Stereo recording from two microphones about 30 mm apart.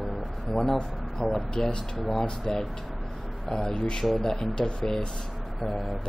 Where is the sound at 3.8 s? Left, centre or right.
Left.